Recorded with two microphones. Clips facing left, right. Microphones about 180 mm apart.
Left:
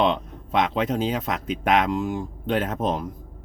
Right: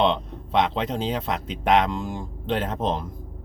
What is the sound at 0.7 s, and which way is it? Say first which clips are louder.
Speech: left 2 dB; 5° left (ahead or behind).